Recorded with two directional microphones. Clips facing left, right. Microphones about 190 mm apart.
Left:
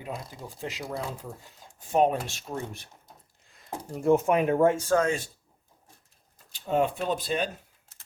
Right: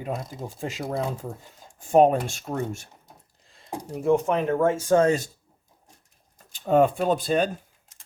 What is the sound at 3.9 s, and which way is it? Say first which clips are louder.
Speech: even; centre (ahead or behind).